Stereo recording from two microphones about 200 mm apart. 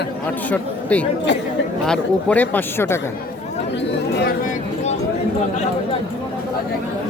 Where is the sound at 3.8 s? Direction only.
55° left (ahead or behind).